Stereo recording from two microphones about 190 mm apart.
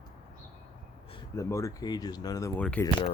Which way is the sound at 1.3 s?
15° left (ahead or behind).